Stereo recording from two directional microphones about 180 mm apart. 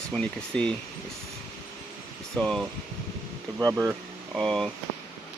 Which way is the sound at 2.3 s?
5° left (ahead or behind).